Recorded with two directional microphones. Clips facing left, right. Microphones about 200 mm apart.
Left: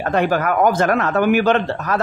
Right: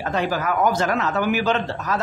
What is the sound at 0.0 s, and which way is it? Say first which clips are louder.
Speech: left 5 dB; 55° left (ahead or behind).